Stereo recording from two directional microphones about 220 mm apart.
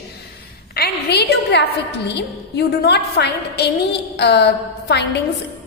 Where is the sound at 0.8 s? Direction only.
45° left (ahead or behind).